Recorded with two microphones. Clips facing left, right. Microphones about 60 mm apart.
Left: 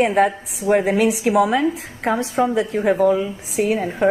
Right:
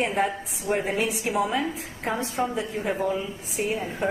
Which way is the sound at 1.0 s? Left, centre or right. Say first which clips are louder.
Left 9 dB; left.